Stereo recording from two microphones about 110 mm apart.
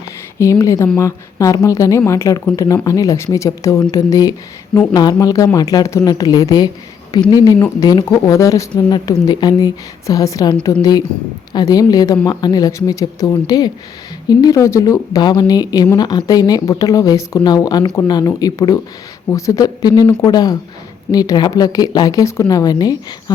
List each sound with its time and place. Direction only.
0.3 s speech: 30° left (ahead or behind)
10.5 s a woman's voice: 45° left (ahead or behind)
11.5 s speech: 35° left (ahead or behind)